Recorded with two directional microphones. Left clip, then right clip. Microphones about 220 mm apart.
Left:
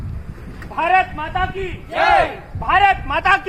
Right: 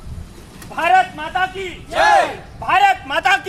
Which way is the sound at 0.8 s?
25° right (ahead or behind).